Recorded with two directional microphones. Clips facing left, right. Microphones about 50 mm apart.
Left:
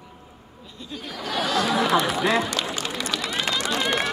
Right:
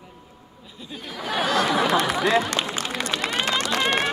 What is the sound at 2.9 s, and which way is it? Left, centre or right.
Run, right.